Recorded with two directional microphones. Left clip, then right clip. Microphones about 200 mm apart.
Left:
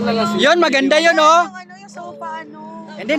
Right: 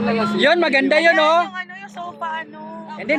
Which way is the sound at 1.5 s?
10° right (ahead or behind).